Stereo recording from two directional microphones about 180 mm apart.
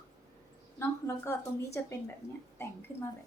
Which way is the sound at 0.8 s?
15° left (ahead or behind).